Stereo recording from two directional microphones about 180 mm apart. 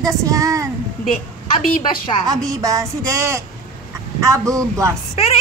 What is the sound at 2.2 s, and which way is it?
Speech, 20° right (ahead or behind).